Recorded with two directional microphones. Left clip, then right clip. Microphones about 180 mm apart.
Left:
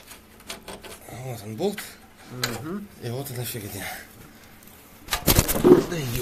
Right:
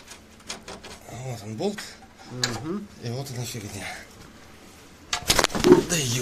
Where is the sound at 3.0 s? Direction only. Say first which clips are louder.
Left 1 dB; 20° left (ahead or behind).